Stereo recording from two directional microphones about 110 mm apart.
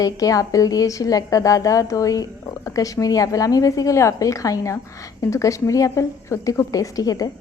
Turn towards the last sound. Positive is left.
turn(degrees=35)  # may be behind; listen again after turning